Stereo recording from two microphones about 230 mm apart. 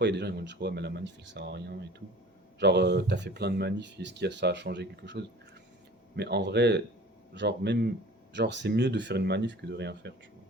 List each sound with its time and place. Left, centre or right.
0.0 s speech: right